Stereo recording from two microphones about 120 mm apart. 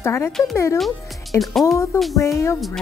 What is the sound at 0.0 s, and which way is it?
Speech, 20° left (ahead or behind).